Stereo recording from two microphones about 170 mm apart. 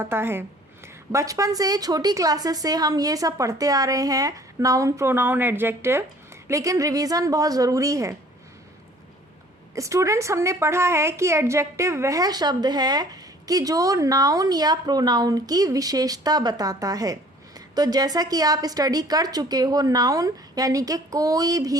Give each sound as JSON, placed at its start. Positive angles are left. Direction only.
{"t": 0.0, "sound": "a woman's voice", "side_deg": -15}
{"t": 9.7, "sound": "a woman's voice", "side_deg": -20}